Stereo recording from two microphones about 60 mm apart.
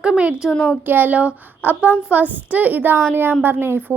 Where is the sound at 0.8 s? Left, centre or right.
Right.